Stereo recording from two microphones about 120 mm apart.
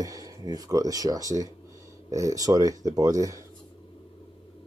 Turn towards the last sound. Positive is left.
turn(degrees=-30)  # may be behind; listen again after turning